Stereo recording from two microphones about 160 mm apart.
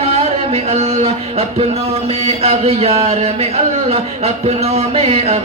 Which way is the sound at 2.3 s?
40° right (ahead or behind).